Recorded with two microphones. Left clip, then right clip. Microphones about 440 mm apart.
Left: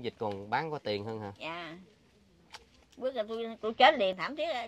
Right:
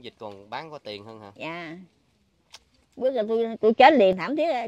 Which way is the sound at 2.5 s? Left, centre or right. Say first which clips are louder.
Right 1 dB; centre.